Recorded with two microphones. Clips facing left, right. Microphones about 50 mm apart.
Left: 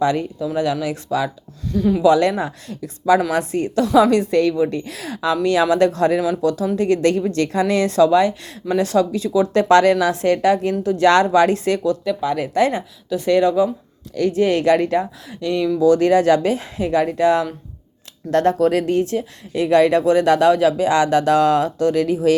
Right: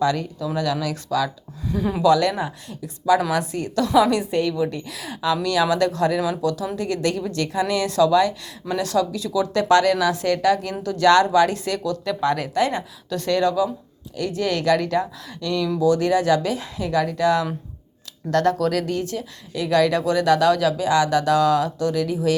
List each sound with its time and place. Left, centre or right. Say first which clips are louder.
0.0 s speech: left 3 dB; left
1.6 s speech: left 5 dB; centre
2.0 s speech: left 2 dB; left
2.4 s speech: left 3 dB; left
3.3 s speech: left 4 dB; left
3.9 s speech: left 4 dB; left
4.3 s a woman's voice: left 5 dB; left
4.5 s speech: left 4 dB; left
12.0 s a woman's voice: left 2 dB; centre; by 15.7 s left
15.8 s speech: left 5 dB; left